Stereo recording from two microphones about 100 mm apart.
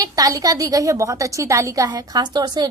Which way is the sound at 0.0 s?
35° right (ahead or behind).